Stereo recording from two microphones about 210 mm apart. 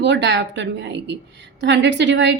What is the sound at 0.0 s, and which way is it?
A woman's voice, 55° right (ahead or behind).